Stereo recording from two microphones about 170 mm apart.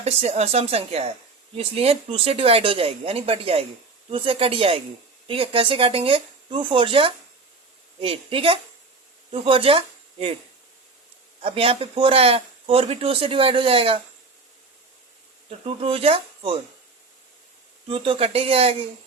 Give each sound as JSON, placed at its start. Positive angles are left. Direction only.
{"t": 0.0, "sound": "speech", "side_deg": -40}
{"t": 11.4, "sound": "speech", "side_deg": -35}
{"t": 15.4, "sound": "speech", "side_deg": -35}
{"t": 17.8, "sound": "speech", "side_deg": -30}